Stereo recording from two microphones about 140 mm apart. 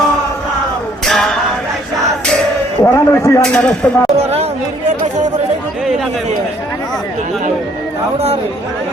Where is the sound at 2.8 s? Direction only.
20° left (ahead or behind).